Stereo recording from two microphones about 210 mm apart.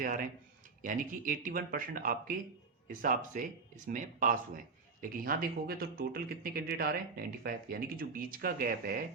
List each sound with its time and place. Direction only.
0.0 s a man's voice: 40° right (ahead or behind)